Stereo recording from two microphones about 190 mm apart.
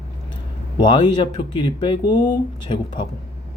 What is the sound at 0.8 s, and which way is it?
Speech, 25° left (ahead or behind).